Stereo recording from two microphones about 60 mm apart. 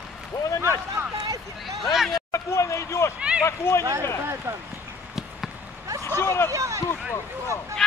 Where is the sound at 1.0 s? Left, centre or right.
Right.